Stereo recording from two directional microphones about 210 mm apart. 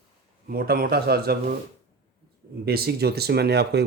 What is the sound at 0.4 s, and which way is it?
Speech, 45° right (ahead or behind).